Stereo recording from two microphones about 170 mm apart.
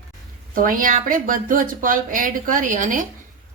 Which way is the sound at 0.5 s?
55° right (ahead or behind).